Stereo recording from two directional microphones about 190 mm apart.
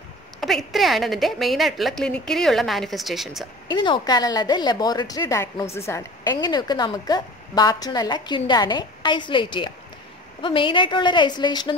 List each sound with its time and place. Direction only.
0.4 s a woman's voice: centre (ahead or behind)
3.6 s a woman's voice: 25° left (ahead or behind)